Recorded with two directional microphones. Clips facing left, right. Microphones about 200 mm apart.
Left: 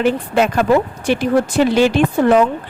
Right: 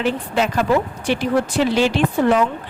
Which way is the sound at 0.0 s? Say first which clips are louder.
Left 5 dB; 55° left (ahead or behind).